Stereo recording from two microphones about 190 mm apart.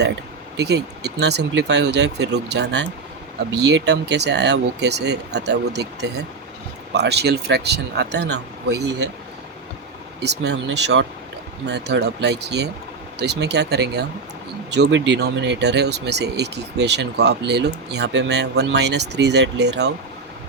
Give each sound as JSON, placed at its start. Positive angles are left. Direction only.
{"t": 0.5, "sound": "speech", "side_deg": -65}
{"t": 10.2, "sound": "speech", "side_deg": -65}